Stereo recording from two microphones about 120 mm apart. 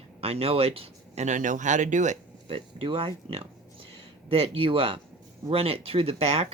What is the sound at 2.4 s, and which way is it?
Speech, 45° right (ahead or behind).